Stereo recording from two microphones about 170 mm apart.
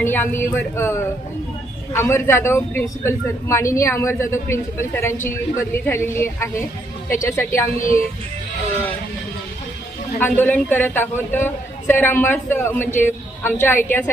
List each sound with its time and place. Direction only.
0.0 s a man's voice: 10° left (ahead or behind)
10.2 s a man's voice: 10° left (ahead or behind)